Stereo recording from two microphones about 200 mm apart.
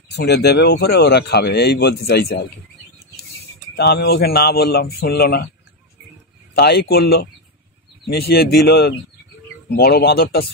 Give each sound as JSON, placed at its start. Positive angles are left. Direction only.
{"t": 0.1, "sound": "speech", "side_deg": 55}
{"t": 3.7, "sound": "speech", "side_deg": 55}
{"t": 6.5, "sound": "speech", "side_deg": 55}